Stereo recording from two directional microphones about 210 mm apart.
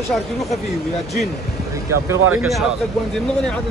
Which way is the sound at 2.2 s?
85° right.